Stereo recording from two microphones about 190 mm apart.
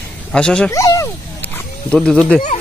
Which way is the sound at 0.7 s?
15° left (ahead or behind).